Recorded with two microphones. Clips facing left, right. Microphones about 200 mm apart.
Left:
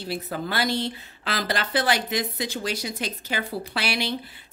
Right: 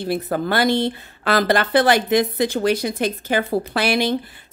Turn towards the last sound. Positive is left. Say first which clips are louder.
# right 8 dB
turn(degrees=-50)  # may be behind; listen again after turning